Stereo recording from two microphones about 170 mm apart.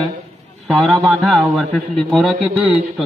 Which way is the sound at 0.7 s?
Centre (ahead or behind).